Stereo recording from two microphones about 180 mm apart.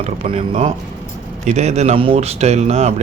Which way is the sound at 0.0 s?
35° right (ahead or behind).